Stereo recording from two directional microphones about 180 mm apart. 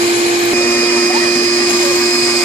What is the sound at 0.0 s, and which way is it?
Vacuum cleaner, 30° right (ahead or behind).